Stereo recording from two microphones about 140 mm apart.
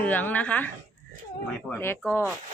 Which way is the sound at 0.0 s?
10° left (ahead or behind).